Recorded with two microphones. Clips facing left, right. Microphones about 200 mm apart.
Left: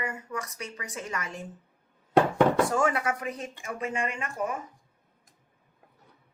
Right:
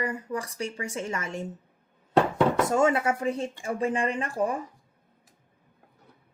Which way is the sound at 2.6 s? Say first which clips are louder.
Right 3 dB; 25° right (ahead or behind).